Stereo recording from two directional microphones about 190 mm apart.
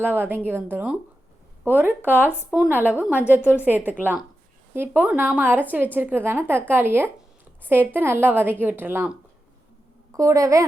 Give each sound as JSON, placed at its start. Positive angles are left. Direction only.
{"t": 0.0, "sound": "a woman's voice", "side_deg": -10}